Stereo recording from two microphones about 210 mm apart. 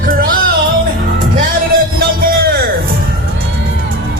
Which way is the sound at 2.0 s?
45° right (ahead or behind).